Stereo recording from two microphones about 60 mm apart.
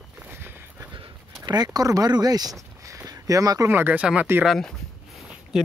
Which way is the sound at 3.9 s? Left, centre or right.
Right.